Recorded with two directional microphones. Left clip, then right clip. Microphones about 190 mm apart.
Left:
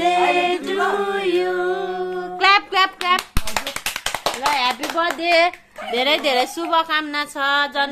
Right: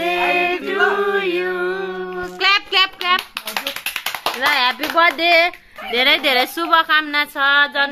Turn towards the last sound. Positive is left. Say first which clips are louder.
# right 4 dB
turn(degrees=5)  # may be behind; listen again after turning